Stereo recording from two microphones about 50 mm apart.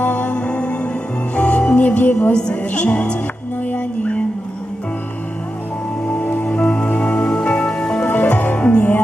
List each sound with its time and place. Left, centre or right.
0.0 s music: left
2.3 s a woman's voice: left
3.7 s music: left
6.1 s music: left
8.0 s music: left